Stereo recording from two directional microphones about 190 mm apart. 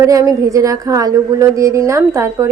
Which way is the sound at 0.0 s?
15° right (ahead or behind).